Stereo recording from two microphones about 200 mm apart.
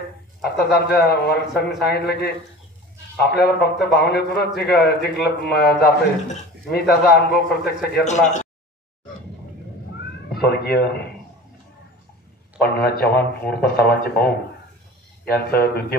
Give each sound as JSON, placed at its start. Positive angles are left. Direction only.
{"t": 0.4, "sound": "a man's voice", "side_deg": 50}
{"t": 8.1, "sound": "speech", "side_deg": 35}
{"t": 10.3, "sound": "speech", "side_deg": 55}
{"t": 12.5, "sound": "a man's voice", "side_deg": 55}
{"t": 15.3, "sound": "a man's voice", "side_deg": 50}